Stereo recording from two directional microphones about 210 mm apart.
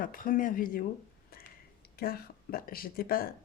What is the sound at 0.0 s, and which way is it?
Speech, 40° left (ahead or behind).